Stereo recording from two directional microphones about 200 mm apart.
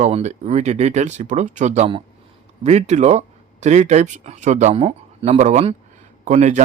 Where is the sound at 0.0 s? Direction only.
35° right (ahead or behind).